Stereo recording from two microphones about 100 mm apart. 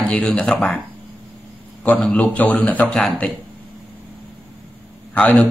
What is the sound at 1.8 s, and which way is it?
Speech, 15° left (ahead or behind).